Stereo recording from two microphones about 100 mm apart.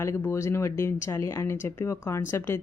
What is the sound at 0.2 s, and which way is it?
A woman's voice, 25° left (ahead or behind).